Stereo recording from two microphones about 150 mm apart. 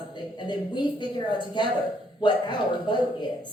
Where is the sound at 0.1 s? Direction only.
30° left (ahead or behind).